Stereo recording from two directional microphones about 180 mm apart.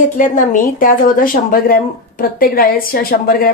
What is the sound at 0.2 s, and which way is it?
A woman's voice, 45° left (ahead or behind).